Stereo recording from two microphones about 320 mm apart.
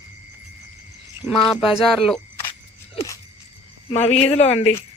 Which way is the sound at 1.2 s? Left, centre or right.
Centre.